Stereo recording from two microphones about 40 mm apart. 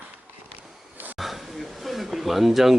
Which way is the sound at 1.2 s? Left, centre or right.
Centre.